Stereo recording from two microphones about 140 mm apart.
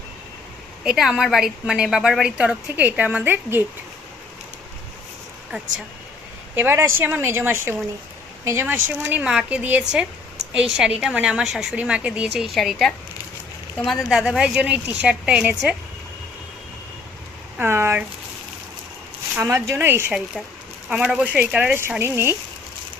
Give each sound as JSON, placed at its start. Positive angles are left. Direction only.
{"t": 0.9, "sound": "speech", "side_deg": -5}
{"t": 6.6, "sound": "speech", "side_deg": -20}
{"t": 17.6, "sound": "speech", "side_deg": -15}
{"t": 19.4, "sound": "speech", "side_deg": -20}